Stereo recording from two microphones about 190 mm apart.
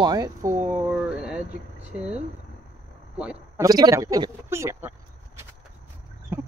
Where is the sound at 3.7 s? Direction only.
20° right (ahead or behind).